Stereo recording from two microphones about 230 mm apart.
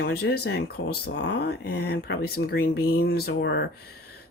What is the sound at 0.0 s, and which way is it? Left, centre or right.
Speech, left.